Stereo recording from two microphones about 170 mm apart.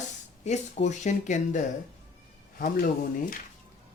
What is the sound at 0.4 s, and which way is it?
Speech, 40° left (ahead or behind).